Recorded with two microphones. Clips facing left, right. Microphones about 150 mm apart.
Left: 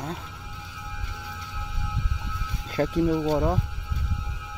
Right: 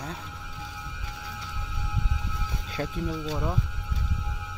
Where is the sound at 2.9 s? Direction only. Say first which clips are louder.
Left 9 dB; 80° left.